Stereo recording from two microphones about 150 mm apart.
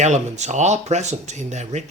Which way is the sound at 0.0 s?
50° right (ahead or behind).